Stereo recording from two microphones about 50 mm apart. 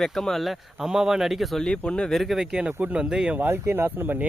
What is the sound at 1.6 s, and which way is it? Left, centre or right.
Speech, left.